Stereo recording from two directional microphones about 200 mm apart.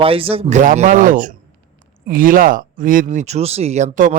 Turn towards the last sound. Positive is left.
turn(degrees=-40)  # may be behind; listen again after turning